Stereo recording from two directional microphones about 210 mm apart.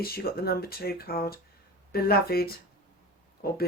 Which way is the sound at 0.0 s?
45° left (ahead or behind).